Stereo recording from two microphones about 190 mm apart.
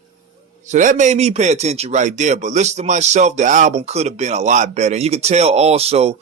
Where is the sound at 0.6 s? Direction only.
40° right (ahead or behind).